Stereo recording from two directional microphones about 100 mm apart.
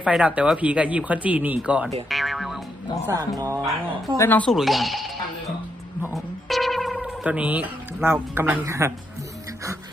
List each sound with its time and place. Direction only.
0.0 s speech: 10° right (ahead or behind)
2.0 s music: centre (ahead or behind)
3.1 s speech: 40° right (ahead or behind)
4.4 s speech: centre (ahead or behind)
6.1 s music: centre (ahead or behind)
7.3 s speech: 15° right (ahead or behind)